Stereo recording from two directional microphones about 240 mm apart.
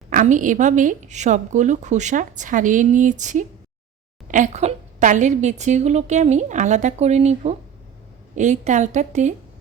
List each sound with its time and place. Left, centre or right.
0.1 s a woman's voice: right